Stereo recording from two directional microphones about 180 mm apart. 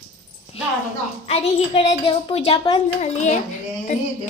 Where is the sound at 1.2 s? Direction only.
35° left (ahead or behind).